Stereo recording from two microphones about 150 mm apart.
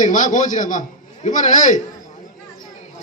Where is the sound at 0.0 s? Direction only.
60° left (ahead or behind).